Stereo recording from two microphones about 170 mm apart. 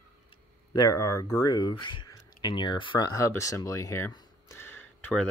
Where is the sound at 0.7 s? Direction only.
20° left (ahead or behind).